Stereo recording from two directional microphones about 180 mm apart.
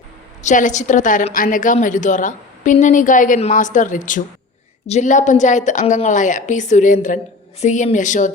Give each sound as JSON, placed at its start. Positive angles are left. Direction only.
{"t": 0.4, "sound": "a woman's voice", "side_deg": 45}